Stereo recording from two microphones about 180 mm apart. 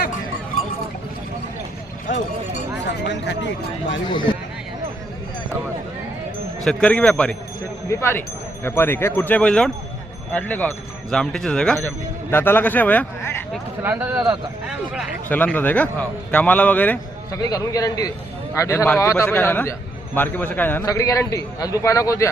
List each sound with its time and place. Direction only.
3.1 s speech: 85° left
4.0 s a man's voice: 25° left (ahead or behind)
6.7 s a man's voice: 5° left (ahead or behind)
7.9 s speech: 15° left (ahead or behind)
13.8 s a man's voice: 10° right (ahead or behind)
15.3 s speech: 10° left (ahead or behind)
17.4 s a man's voice: 20° left (ahead or behind)